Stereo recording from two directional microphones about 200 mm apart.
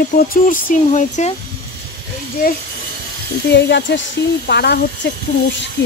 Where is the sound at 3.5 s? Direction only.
60° left (ahead or behind).